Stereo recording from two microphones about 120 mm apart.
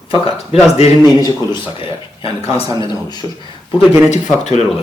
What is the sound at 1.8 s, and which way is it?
Speech, 50° left (ahead or behind).